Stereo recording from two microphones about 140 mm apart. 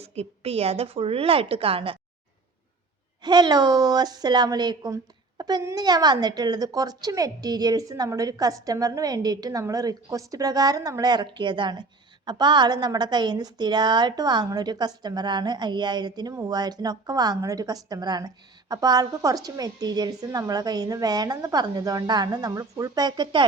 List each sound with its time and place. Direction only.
0.0 s a woman's voice: 45° right (ahead or behind)
3.2 s a woman's voice: 30° right (ahead or behind)